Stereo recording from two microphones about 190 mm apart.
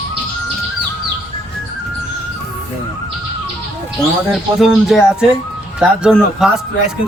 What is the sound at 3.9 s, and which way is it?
Speech, centre (ahead or behind).